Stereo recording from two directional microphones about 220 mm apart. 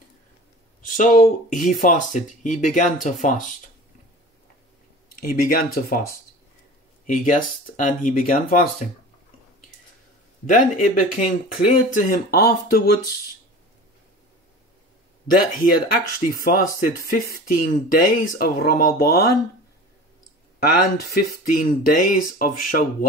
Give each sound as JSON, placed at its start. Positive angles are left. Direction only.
{"t": 0.8, "sound": "speech", "side_deg": 35}
{"t": 5.2, "sound": "speech", "side_deg": 40}
{"t": 7.1, "sound": "speech", "side_deg": 35}
{"t": 10.5, "sound": "speech", "side_deg": 35}
{"t": 15.3, "sound": "speech", "side_deg": 40}
{"t": 20.6, "sound": "speech", "side_deg": 45}